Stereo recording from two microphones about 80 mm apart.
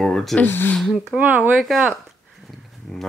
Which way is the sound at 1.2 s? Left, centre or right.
Right.